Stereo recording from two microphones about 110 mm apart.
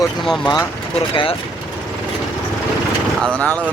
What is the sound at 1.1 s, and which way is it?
Speech, 50° left (ahead or behind).